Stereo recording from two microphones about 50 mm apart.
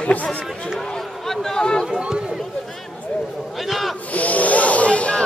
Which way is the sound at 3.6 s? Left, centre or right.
Centre.